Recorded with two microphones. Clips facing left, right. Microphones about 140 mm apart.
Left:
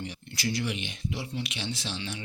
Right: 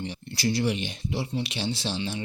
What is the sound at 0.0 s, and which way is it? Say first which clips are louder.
Speech: right 5 dB; 30° right (ahead or behind).